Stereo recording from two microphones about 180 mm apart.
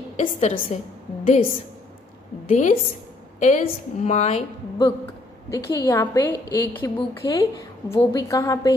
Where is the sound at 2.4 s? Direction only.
45° left (ahead or behind).